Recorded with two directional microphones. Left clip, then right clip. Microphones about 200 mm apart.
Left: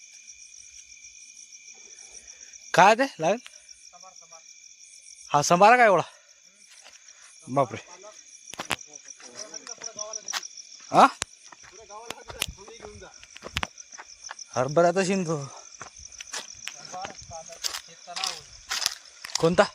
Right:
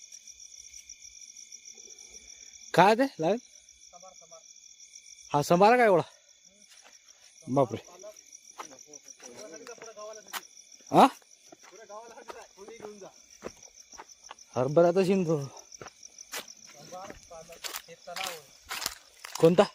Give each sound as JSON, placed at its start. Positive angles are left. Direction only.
{"t": 2.7, "sound": "speech", "side_deg": -5}
{"t": 5.3, "sound": "speech", "side_deg": -5}
{"t": 7.5, "sound": "speech", "side_deg": -10}
{"t": 9.4, "sound": "a sound", "side_deg": -10}
{"t": 10.0, "sound": "cricket", "side_deg": -10}
{"t": 10.9, "sound": "speech", "side_deg": -15}
{"t": 12.3, "sound": "a sound", "side_deg": 0}
{"t": 13.9, "sound": "cricket", "side_deg": 0}
{"t": 17.6, "sound": "snake", "side_deg": -10}
{"t": 18.7, "sound": "walk", "side_deg": -5}